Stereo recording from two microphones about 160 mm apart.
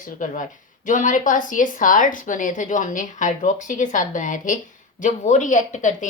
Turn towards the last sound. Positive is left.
turn(degrees=50)  # may be behind; listen again after turning